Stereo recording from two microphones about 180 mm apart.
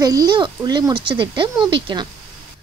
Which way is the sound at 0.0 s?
20° right (ahead or behind).